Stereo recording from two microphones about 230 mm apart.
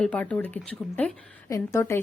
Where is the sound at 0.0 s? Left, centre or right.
Centre.